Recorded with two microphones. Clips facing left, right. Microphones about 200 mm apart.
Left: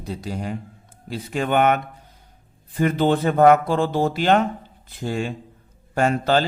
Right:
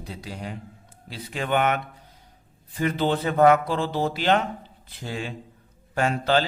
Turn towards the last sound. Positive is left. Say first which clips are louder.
# left 3 dB
turn(degrees=45)  # may be behind; listen again after turning